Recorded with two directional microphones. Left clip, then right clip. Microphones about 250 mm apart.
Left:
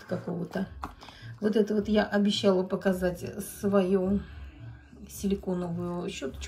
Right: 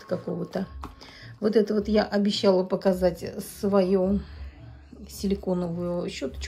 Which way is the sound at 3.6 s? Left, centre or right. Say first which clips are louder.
Right 3 dB; right.